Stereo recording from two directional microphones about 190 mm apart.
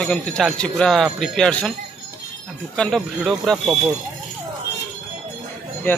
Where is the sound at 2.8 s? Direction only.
Centre (ahead or behind).